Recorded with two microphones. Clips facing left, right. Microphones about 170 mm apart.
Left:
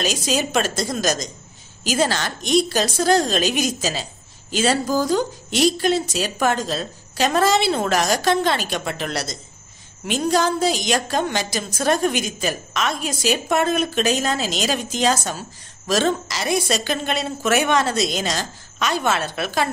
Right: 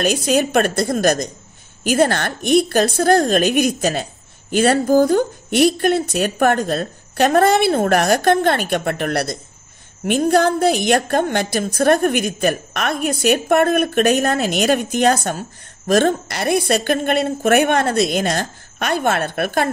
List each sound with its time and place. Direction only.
0.0 s a woman's voice: 55° right (ahead or behind)